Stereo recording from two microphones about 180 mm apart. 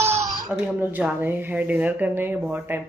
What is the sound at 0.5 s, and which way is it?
Speech, 5° right (ahead or behind).